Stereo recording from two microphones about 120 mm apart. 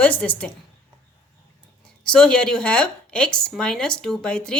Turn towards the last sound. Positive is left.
turn(degrees=5)  # may be behind; listen again after turning